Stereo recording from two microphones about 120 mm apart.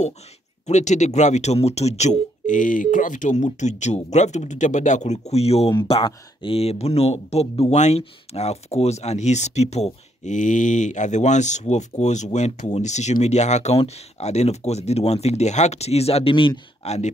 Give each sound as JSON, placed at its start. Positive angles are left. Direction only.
{"t": 0.7, "sound": "speech", "side_deg": 75}
{"t": 5.3, "sound": "speech", "side_deg": 55}
{"t": 7.7, "sound": "speech", "side_deg": 75}
{"t": 8.0, "sound": "speech", "side_deg": 60}
{"t": 10.2, "sound": "speech", "side_deg": 90}
{"t": 16.8, "sound": "speech", "side_deg": 65}